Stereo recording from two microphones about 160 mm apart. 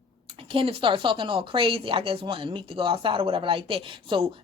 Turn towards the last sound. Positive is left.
turn(degrees=-35)  # may be behind; listen again after turning